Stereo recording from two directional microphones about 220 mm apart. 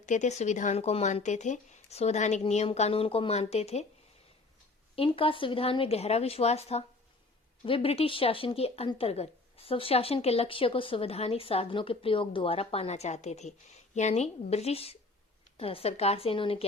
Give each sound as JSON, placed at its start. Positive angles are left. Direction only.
{"t": 0.0, "sound": "speech", "side_deg": 35}
{"t": 4.9, "sound": "speech", "side_deg": 25}